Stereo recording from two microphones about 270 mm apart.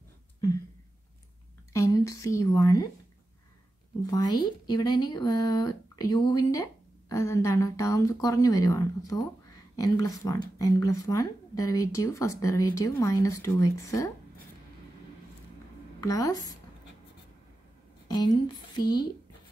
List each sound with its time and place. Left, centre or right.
1.7 s speech: centre
4.0 s speech: centre
16.0 s speech: centre
18.0 s a sound: centre
18.8 s speech: centre